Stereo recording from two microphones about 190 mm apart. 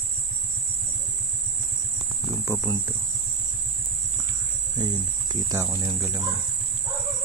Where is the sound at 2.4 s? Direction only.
20° right (ahead or behind).